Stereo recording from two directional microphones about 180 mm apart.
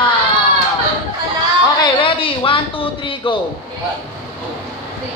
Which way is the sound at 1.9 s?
30° left (ahead or behind).